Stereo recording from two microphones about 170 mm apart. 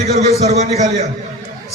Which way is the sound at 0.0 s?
40° right (ahead or behind).